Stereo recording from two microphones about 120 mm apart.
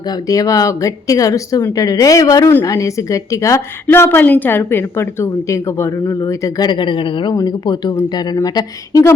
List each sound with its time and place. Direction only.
0.3 s a woman's voice: 30° left (ahead or behind)
6.7 s a woman's voice: 40° left (ahead or behind)